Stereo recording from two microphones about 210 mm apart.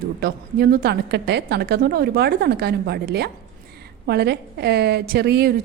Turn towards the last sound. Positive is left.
turn(degrees=-50)  # may be behind; listen again after turning